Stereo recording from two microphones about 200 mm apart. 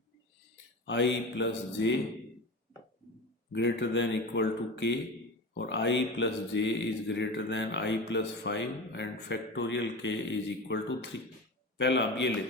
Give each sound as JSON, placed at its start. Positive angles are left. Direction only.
{"t": 0.9, "sound": "speech", "side_deg": 65}
{"t": 3.5, "sound": "speech", "side_deg": 60}